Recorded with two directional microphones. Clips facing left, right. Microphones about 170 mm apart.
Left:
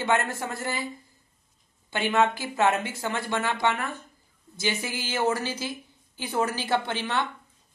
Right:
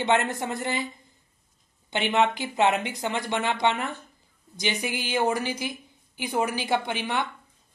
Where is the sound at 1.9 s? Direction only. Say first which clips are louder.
Even; 20° right (ahead or behind).